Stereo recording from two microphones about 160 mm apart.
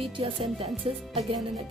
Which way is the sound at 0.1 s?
35° right (ahead or behind).